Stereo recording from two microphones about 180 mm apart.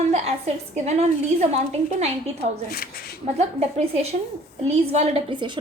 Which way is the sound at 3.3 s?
35° right (ahead or behind).